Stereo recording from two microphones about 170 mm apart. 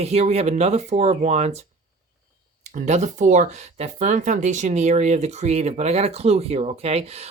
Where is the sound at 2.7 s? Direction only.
45° right (ahead or behind).